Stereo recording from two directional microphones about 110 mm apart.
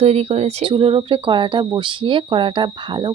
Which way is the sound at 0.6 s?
50° right (ahead or behind).